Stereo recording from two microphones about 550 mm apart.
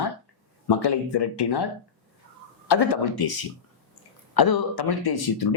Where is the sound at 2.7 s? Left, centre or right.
Left.